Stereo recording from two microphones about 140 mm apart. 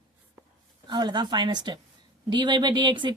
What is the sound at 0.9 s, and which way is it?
Speech, 30° right (ahead or behind).